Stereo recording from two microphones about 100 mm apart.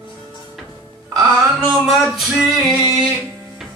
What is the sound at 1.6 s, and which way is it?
Singing, 5° right (ahead or behind).